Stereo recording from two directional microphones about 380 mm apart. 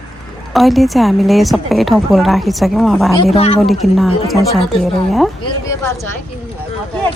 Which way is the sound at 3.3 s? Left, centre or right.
Centre.